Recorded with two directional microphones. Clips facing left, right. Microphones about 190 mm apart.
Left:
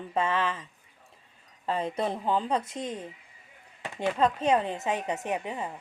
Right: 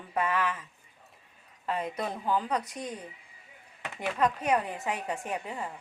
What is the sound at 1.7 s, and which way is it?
A woman's voice, 30° left (ahead or behind).